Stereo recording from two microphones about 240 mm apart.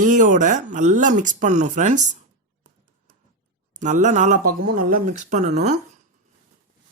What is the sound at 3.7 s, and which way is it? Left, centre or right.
Speech, right.